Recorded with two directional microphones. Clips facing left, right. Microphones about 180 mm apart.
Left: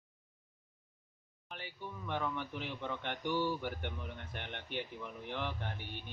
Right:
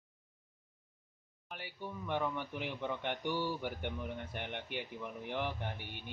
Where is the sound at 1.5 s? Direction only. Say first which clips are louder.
Right 2 dB; 15° right (ahead or behind).